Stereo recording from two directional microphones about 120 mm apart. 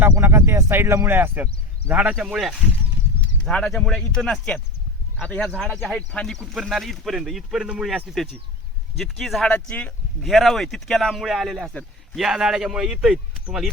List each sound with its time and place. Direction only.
0.2 s speech: 20° right (ahead or behind); by 13.7 s 5° right (ahead or behind)